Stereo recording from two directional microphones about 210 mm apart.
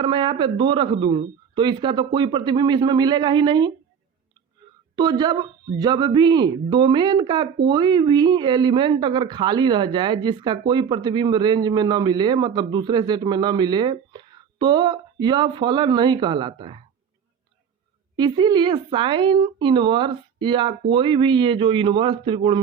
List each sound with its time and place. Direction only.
0.0 s speech: 25° right (ahead or behind)
4.9 s speech: 20° right (ahead or behind)
18.2 s speech: 20° right (ahead or behind)